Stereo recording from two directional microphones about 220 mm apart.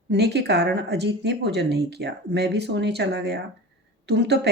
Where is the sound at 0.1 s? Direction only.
50° right (ahead or behind).